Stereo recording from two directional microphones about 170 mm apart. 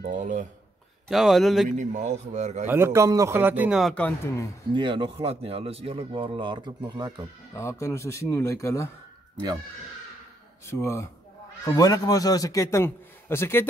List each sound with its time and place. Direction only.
0.0 s speech: 50° right (ahead or behind)
1.0 s speech: centre (ahead or behind)
1.7 s speech: 45° right (ahead or behind)
2.7 s speech: 15° right (ahead or behind); by 4.5 s 10° left (ahead or behind)
4.7 s speech: 30° right (ahead or behind)
7.5 s speech: 15° left (ahead or behind)
10.7 s a man's voice: 15° left (ahead or behind)